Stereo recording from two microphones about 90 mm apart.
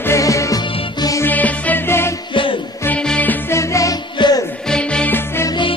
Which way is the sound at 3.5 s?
35° left (ahead or behind).